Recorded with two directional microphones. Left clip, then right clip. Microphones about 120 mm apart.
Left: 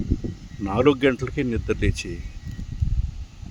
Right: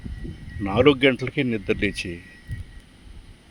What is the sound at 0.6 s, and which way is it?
Speech, 5° left (ahead or behind).